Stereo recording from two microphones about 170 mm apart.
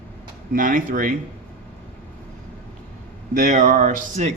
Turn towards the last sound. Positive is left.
turn(degrees=-50)  # may be behind; listen again after turning